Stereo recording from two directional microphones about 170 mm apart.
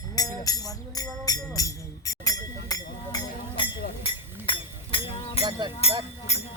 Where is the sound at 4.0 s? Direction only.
30° left (ahead or behind).